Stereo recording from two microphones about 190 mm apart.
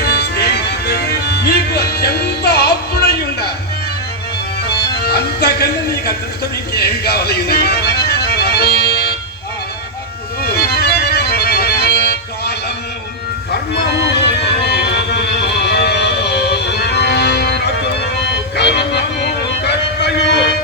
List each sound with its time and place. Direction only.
0.1 s music: 55° left (ahead or behind)
4.9 s music: 55° left (ahead or behind)
10.4 s music: 55° left (ahead or behind)
14.0 s music: 65° left (ahead or behind)